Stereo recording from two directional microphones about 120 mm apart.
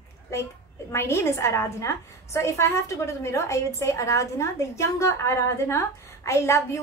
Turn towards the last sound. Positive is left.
turn(degrees=25)  # may be behind; listen again after turning